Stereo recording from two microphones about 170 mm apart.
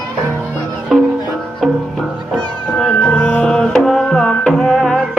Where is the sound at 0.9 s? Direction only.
Centre (ahead or behind).